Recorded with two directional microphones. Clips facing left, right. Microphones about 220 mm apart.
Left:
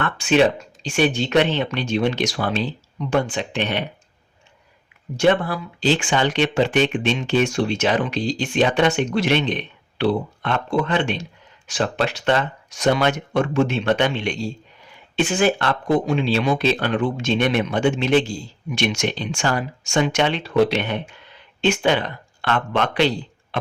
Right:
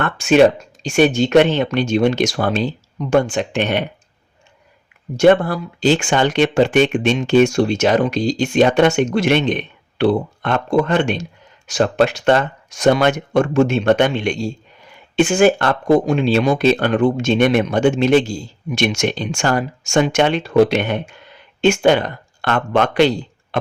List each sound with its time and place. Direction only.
0.0 s speech: 45° right (ahead or behind)
5.1 s speech: 45° right (ahead or behind)